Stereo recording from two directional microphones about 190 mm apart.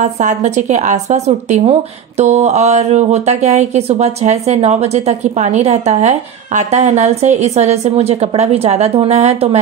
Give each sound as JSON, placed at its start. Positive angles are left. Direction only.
{"t": 0.0, "sound": "speech", "side_deg": -40}